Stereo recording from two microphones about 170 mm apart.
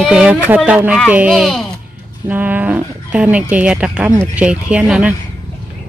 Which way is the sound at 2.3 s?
10° right (ahead or behind).